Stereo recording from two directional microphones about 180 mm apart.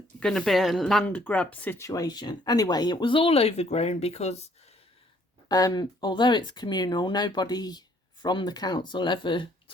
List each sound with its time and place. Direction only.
0.2 s speech: 5° left (ahead or behind); by 4.4 s 35° left (ahead or behind)
5.5 s speech: 20° left (ahead or behind)